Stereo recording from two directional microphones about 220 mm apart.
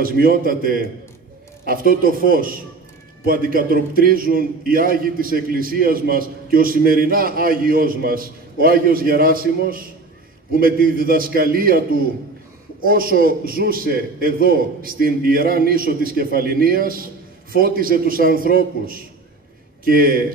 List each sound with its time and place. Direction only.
0.0 s a man's voice: 40° right (ahead or behind)